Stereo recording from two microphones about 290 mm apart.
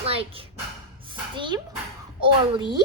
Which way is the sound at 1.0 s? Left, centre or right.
Centre.